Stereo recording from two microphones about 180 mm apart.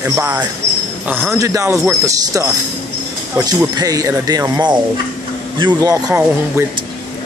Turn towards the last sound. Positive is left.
turn(degrees=-10)  # may be behind; listen again after turning